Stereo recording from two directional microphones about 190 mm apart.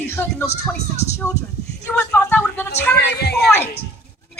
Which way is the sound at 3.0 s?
60° left (ahead or behind).